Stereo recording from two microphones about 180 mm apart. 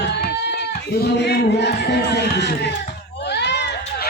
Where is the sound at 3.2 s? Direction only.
70° left (ahead or behind).